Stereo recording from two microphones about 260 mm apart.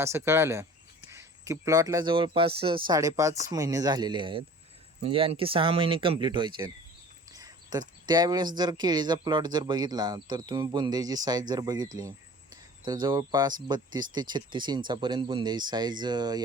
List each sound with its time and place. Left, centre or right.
0.0 s speech: centre
11.9 s a sound: centre
13.7 s speech: centre